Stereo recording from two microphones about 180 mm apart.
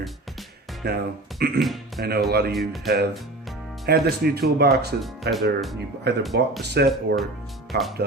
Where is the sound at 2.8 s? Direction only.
60° right (ahead or behind).